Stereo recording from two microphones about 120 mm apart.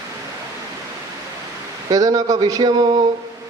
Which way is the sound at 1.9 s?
30° right (ahead or behind).